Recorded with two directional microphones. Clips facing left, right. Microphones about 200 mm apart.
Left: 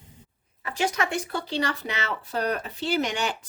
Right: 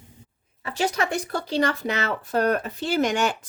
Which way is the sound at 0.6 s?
35° right (ahead or behind).